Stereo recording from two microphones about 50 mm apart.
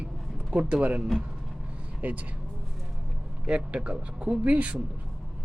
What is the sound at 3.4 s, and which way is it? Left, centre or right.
Speech, right.